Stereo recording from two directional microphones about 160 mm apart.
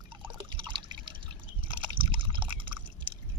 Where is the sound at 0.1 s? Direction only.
30° right (ahead or behind).